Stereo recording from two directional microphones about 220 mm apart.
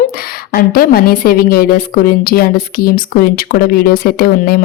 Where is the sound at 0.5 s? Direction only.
40° left (ahead or behind).